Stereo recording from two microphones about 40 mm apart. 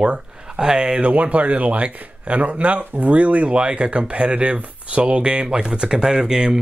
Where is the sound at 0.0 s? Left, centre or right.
Right.